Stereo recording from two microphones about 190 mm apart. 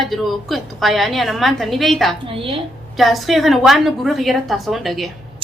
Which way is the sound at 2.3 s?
30° right (ahead or behind).